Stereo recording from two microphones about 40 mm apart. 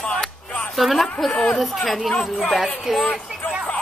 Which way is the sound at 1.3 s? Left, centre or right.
Left.